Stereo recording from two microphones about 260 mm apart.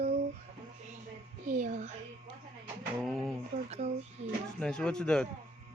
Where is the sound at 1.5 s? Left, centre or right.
Right.